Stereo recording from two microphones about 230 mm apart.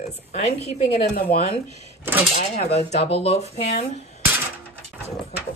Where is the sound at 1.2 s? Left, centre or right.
Left.